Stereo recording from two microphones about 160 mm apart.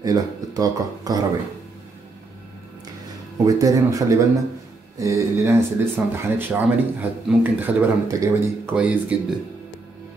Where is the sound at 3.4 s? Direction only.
20° right (ahead or behind).